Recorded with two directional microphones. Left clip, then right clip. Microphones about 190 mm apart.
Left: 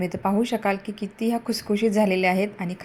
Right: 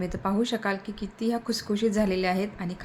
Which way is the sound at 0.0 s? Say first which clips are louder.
Left 4 dB; 15° left (ahead or behind).